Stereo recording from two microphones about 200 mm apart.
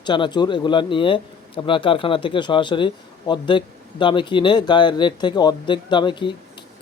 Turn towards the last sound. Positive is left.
turn(degrees=25)  # may be behind; listen again after turning